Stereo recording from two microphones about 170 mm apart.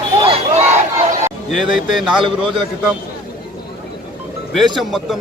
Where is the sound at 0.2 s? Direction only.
35° right (ahead or behind).